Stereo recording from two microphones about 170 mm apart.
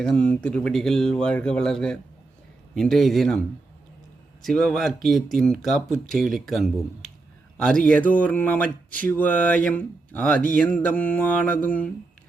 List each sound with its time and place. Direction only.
0.0 s speech: 5° left (ahead or behind)
4.4 s speech: 5° left (ahead or behind)